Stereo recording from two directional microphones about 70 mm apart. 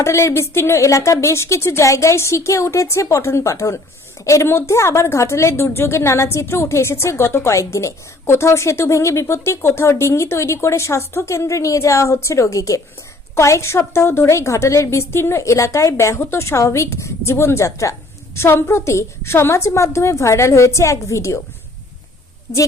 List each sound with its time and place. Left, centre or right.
0.0 s a woman's voice: left
4.4 s a woman's voice: left